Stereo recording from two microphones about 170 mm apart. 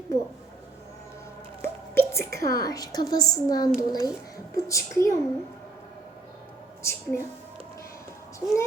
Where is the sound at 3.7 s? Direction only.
20° left (ahead or behind).